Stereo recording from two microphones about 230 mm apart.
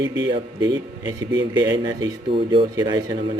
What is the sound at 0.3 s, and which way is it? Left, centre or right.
Speech, centre.